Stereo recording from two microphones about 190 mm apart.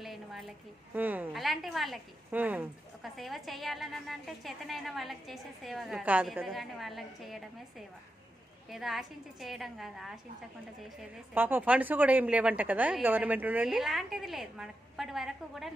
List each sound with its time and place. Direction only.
0.0 s a sound: centre (ahead or behind)
0.9 s a woman's voice: 10° right (ahead or behind)
8.6 s a woman's voice: centre (ahead or behind)